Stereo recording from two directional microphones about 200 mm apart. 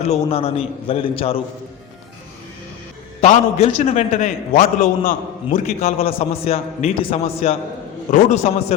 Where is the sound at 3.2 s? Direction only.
35° left (ahead or behind).